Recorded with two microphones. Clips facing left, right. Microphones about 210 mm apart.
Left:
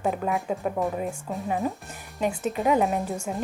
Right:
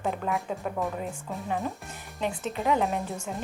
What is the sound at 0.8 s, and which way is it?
A woman's voice, 20° left (ahead or behind).